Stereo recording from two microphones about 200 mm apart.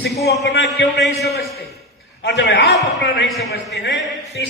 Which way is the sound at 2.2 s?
60° left (ahead or behind).